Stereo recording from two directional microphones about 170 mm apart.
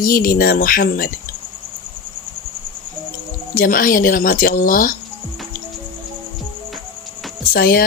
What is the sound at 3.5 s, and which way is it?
Speech, 55° left (ahead or behind).